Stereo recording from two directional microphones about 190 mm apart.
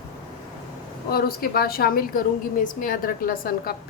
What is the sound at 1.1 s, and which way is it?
A woman's voice, 50° left (ahead or behind).